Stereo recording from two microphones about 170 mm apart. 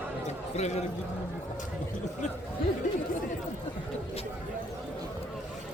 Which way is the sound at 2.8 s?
50° left (ahead or behind).